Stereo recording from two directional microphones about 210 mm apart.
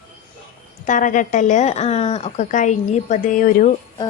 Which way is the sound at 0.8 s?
40° left (ahead or behind).